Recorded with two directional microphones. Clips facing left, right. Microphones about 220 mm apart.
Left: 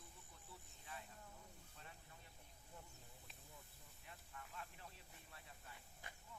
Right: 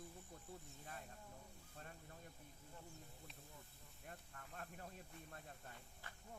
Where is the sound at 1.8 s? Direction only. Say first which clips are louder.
Right 7 dB; 50° right (ahead or behind).